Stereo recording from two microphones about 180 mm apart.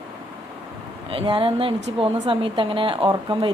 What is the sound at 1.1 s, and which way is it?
Speech, 30° right (ahead or behind).